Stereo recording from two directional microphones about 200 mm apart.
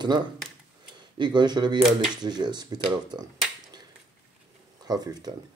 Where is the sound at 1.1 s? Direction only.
20° right (ahead or behind).